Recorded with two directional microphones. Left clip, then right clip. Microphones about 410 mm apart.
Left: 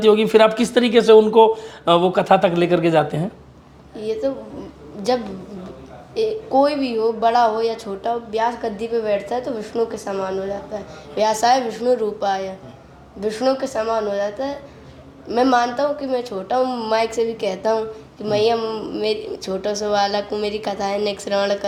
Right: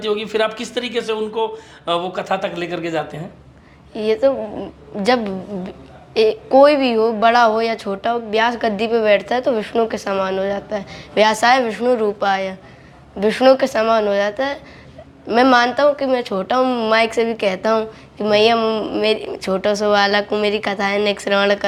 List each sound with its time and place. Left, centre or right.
0.0 s speech: left
3.9 s a woman's voice: right
6.1 s a woman's voice: right